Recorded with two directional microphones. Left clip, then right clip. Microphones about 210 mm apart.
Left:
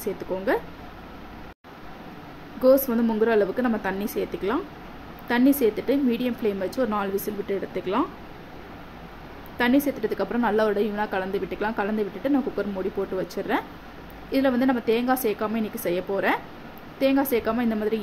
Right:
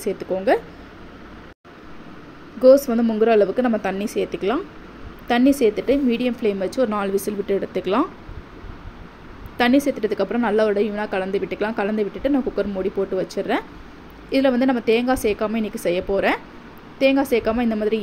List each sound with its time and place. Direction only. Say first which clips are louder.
0.0 s a woman's voice: right 5 dB; 15° right (ahead or behind)
2.6 s a woman's voice: right 6 dB; 15° right (ahead or behind)
9.6 s a woman's voice: right 4 dB; 20° right (ahead or behind)